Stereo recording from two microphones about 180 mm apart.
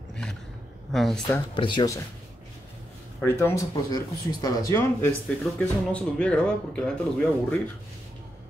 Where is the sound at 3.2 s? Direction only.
15° left (ahead or behind).